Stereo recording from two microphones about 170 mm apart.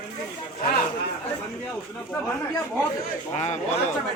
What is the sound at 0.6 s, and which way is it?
Speech, 60° left (ahead or behind).